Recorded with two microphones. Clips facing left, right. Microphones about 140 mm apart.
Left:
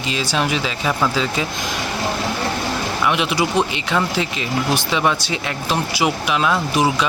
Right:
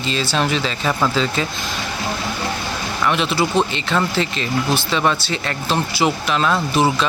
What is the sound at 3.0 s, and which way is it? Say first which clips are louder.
Speech: right 1 dB; 15° left (ahead or behind).